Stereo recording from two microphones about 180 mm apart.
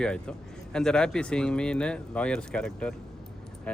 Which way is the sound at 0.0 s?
5° left (ahead or behind).